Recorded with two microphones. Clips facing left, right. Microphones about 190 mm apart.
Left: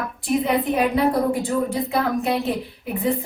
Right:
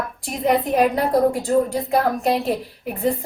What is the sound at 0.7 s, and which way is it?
A woman's voice, 40° right (ahead or behind).